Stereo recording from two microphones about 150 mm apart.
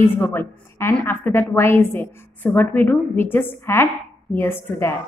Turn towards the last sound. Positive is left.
turn(degrees=15)  # may be behind; listen again after turning